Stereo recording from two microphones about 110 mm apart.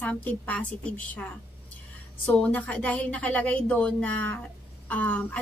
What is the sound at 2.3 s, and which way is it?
A woman's voice, 10° left (ahead or behind).